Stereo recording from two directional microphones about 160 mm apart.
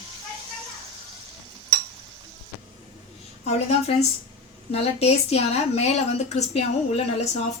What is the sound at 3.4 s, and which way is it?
A woman's voice, 45° left (ahead or behind).